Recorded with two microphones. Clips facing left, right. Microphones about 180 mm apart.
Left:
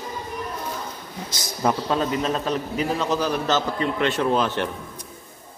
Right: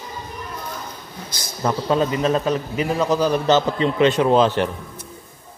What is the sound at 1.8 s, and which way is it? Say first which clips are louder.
A man's voice: right 4 dB; 5° right (ahead or behind).